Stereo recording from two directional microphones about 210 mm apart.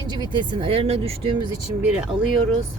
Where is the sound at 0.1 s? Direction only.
20° right (ahead or behind).